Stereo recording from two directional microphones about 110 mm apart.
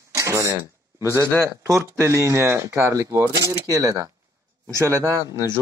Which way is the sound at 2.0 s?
25° right (ahead or behind).